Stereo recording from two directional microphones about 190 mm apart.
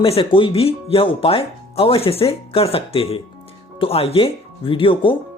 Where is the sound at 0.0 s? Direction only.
30° left (ahead or behind).